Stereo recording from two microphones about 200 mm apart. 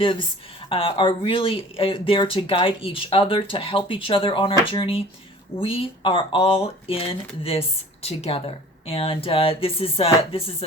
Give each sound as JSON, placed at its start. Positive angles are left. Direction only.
{"t": 0.0, "sound": "speech", "side_deg": 25}